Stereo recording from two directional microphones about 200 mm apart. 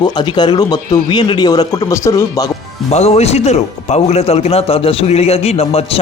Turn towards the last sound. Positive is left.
turn(degrees=30)  # may be behind; listen again after turning